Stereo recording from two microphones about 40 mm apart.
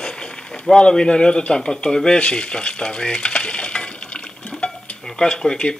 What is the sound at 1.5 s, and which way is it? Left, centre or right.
Stir, centre.